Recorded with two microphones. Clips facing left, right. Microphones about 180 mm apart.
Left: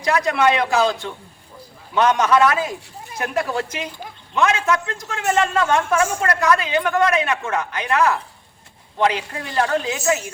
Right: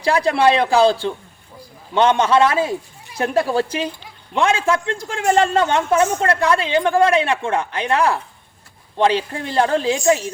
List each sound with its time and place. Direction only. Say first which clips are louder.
0.0 s a man's voice: right 3 dB; 30° right (ahead or behind)